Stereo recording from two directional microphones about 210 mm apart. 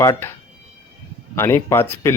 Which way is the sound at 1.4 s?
10° left (ahead or behind).